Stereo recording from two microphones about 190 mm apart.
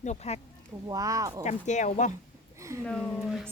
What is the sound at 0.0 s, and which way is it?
Speech, 35° left (ahead or behind).